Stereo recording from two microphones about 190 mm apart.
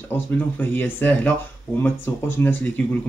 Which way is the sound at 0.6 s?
10° left (ahead or behind).